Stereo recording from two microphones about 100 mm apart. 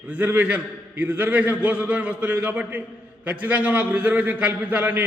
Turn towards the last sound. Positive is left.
turn(degrees=-15)  # may be behind; listen again after turning